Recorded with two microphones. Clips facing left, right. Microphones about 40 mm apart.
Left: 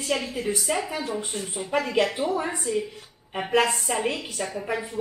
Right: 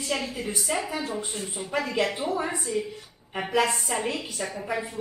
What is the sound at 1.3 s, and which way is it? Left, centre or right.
Speech, centre.